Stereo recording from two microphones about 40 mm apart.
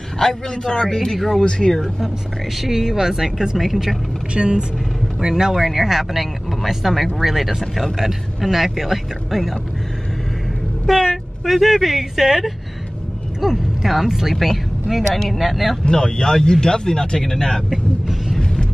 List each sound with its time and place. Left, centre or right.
0.2 s speech: centre
2.6 s speech: centre
4.3 s speech: right; by 9.6 s centre
10.9 s speech: centre
15.8 s speech: centre
17.6 s vehicle: centre